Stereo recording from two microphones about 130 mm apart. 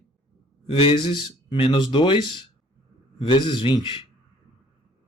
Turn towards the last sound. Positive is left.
turn(degrees=40)  # may be behind; listen again after turning